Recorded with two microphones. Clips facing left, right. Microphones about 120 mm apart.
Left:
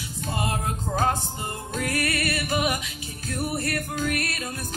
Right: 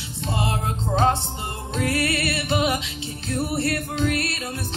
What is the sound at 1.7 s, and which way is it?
Music, 25° right (ahead or behind).